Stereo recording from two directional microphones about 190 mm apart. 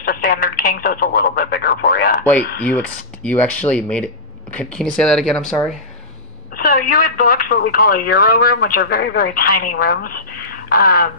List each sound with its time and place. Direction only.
0.0 s telephone: 50° left (ahead or behind)
2.7 s speech: 5° left (ahead or behind)
6.5 s speech: 50° left (ahead or behind)